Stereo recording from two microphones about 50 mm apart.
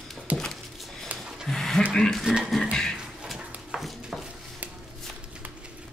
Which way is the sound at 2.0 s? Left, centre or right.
Centre.